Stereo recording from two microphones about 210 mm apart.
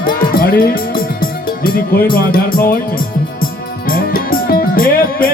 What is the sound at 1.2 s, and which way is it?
Music, 45° left (ahead or behind).